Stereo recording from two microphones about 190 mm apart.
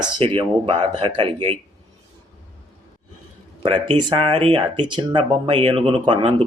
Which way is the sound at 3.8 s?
25° right (ahead or behind).